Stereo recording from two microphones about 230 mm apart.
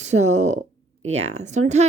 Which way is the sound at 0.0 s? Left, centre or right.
Right.